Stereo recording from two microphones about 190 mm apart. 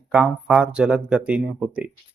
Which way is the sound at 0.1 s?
5° right (ahead or behind).